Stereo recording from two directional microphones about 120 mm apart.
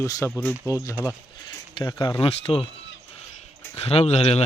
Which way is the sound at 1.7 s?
40° left (ahead or behind).